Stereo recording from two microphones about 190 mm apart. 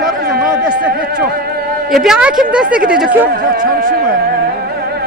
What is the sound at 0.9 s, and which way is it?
Speech, 55° right (ahead or behind).